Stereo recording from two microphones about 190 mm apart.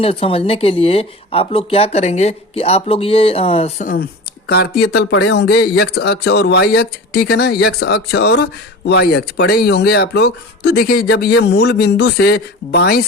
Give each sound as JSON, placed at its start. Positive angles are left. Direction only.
{"t": 0.0, "sound": "speech", "side_deg": 30}
{"t": 4.4, "sound": "speech", "side_deg": 60}